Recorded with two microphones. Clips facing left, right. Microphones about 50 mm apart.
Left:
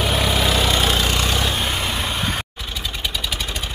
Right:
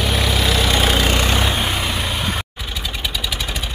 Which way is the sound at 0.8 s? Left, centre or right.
Centre.